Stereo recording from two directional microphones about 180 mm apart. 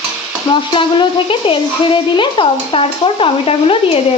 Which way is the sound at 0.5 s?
25° left (ahead or behind).